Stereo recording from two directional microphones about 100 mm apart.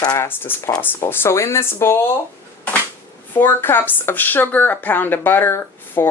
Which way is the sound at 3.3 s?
20° left (ahead or behind).